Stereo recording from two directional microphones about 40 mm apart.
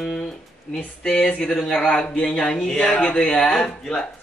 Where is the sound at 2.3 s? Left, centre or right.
Centre.